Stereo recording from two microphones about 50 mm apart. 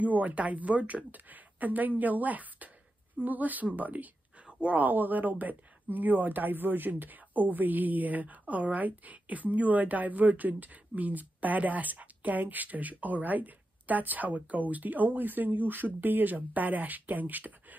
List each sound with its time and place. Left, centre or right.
0.0 s speech: right